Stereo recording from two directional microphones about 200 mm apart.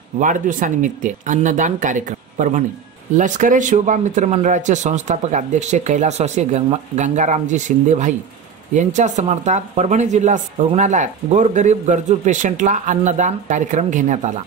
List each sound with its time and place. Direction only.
0.2 s speech: 40° right (ahead or behind)